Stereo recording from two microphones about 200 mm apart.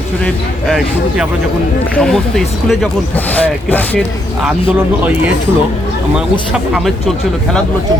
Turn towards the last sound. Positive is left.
turn(degrees=0)  # may be behind; listen again after turning